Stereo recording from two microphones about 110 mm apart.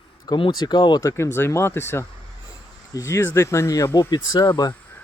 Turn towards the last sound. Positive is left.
turn(degrees=35)  # may be behind; listen again after turning